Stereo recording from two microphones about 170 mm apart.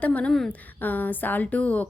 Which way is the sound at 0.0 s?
5° left (ahead or behind).